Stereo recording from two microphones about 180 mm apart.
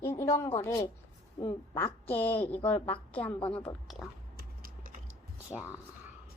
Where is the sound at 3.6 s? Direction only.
Centre (ahead or behind).